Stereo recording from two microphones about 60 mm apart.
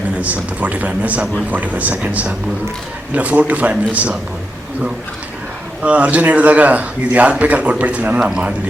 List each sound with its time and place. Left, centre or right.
0.2 s speech: right
5.8 s speech: right